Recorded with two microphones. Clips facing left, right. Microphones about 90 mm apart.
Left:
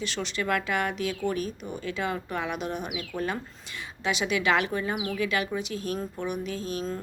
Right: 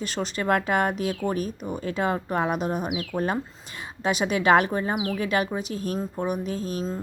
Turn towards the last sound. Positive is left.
turn(degrees=-35)  # may be behind; listen again after turning